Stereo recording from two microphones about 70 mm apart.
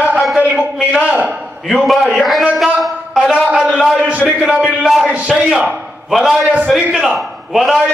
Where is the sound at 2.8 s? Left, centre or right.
Centre.